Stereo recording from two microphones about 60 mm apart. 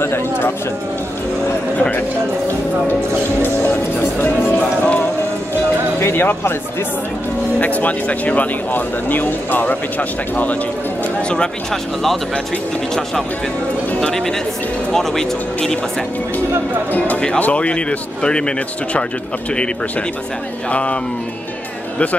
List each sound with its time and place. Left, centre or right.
0.0 s a sound: left
3.4 s music: left
5.9 s music: left
7.6 s speech: left
11.2 s speech: centre
14.0 s speech: centre
17.4 s speech: left
20.7 s speech: left